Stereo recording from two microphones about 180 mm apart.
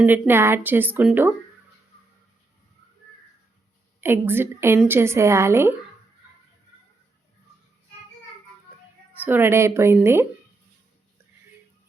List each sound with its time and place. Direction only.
0.0 s a woman's voice: 10° right (ahead or behind)
4.0 s a woman's voice: 10° right (ahead or behind)
9.1 s a woman's voice: 10° right (ahead or behind)